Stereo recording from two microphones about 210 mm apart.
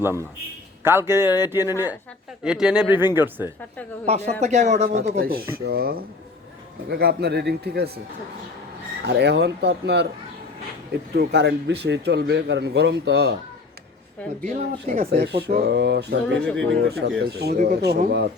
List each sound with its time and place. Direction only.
0.8 s speech: 10° right (ahead or behind)
4.0 s speech: 30° right (ahead or behind)
5.0 s a man's voice: 50° right (ahead or behind)
9.0 s a man's voice: 55° right (ahead or behind)
11.1 s a man's voice: 50° right (ahead or behind)
14.5 s a man's voice: 40° right (ahead or behind)